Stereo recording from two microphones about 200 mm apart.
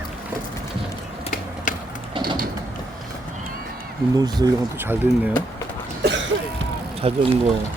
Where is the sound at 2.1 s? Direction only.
20° right (ahead or behind).